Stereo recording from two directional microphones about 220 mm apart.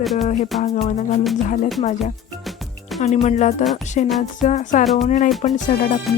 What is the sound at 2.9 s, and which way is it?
Music, centre (ahead or behind).